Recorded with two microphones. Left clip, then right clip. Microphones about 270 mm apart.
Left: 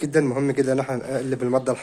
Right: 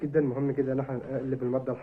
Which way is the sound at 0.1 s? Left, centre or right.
Left.